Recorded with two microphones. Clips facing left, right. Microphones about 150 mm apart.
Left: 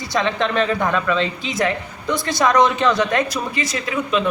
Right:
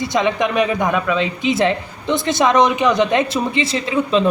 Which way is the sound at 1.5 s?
25° right (ahead or behind).